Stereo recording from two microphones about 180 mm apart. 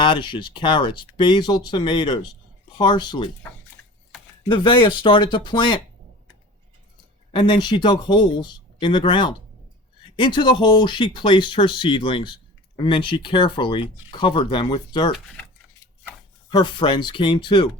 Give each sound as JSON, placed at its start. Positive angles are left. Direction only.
{"t": 0.0, "sound": "speech", "side_deg": 25}
{"t": 3.4, "sound": "speech", "side_deg": 10}
{"t": 4.4, "sound": "speech", "side_deg": 25}
{"t": 7.3, "sound": "speech", "side_deg": 25}
{"t": 16.5, "sound": "speech", "side_deg": 25}